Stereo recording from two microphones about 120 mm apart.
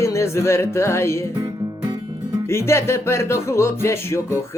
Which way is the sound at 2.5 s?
20° left (ahead or behind).